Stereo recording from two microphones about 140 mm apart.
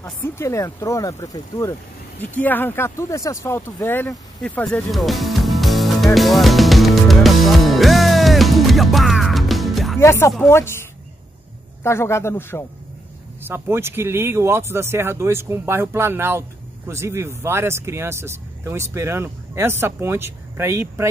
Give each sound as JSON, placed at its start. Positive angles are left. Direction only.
{"t": 0.0, "sound": "speech", "side_deg": 20}
{"t": 2.1, "sound": "speech", "side_deg": 15}
{"t": 4.9, "sound": "music", "side_deg": 0}
{"t": 9.9, "sound": "speech", "side_deg": 20}
{"t": 11.8, "sound": "speech", "side_deg": 20}
{"t": 13.4, "sound": "speech", "side_deg": -15}